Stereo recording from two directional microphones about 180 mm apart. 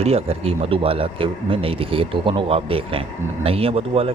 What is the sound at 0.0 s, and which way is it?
Speech, 35° right (ahead or behind).